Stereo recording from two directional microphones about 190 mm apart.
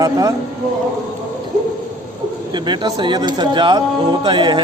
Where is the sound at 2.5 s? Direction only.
25° right (ahead or behind).